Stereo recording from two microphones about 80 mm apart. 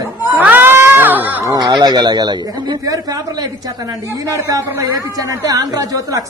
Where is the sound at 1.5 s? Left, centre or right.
Right.